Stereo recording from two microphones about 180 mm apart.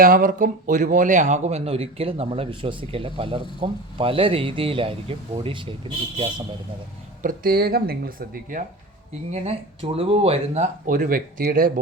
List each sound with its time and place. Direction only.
0.0 s a man's voice: 50° right (ahead or behind); by 6.4 s 25° right (ahead or behind)
7.2 s speech: 50° right (ahead or behind)
9.3 s speech: 35° right (ahead or behind); by 11.7 s 55° right (ahead or behind)